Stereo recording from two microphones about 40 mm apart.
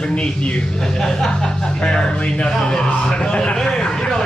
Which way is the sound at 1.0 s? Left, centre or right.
Centre.